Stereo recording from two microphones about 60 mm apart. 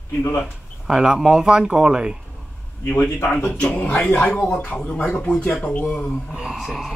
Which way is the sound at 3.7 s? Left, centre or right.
Left.